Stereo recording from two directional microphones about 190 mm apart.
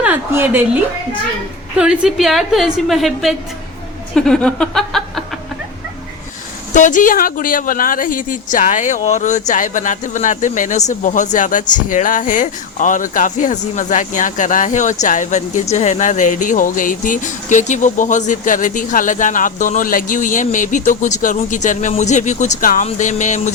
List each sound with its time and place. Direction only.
0.0 s a woman's voice: 10° right (ahead or behind)
1.7 s a woman's voice: 5° right (ahead or behind)
4.1 s a sound: 5° left (ahead or behind)
6.7 s speech: 40° left (ahead or behind)